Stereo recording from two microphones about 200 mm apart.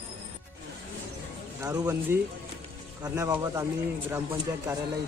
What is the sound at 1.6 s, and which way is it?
A man's voice, 15° right (ahead or behind).